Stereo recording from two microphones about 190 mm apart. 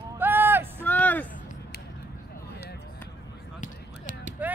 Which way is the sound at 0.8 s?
10° left (ahead or behind).